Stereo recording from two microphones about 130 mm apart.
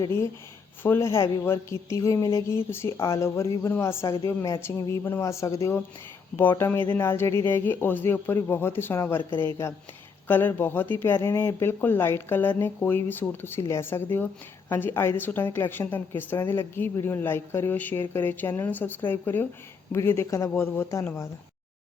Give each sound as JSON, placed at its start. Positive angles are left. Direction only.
{"t": 0.0, "sound": "a woman's voice", "side_deg": 20}